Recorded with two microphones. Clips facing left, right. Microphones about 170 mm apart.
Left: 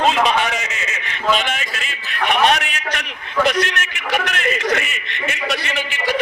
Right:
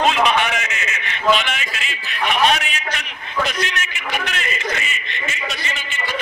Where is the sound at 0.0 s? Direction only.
35° left (ahead or behind).